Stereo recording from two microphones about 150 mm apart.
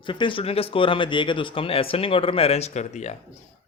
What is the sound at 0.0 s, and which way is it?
Speech, 35° left (ahead or behind).